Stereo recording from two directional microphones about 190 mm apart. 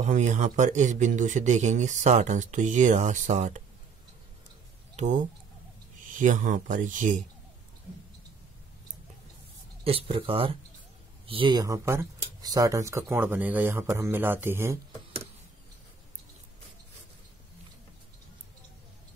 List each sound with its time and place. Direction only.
0.0 s speech: 35° right (ahead or behind)
4.9 s speech: 40° right (ahead or behind)
9.8 s speech: 30° right (ahead or behind); by 14.8 s 15° right (ahead or behind)